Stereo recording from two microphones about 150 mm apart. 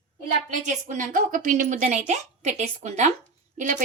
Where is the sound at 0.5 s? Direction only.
60° right (ahead or behind).